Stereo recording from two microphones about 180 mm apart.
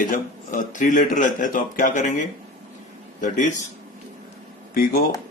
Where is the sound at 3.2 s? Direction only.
45° left (ahead or behind).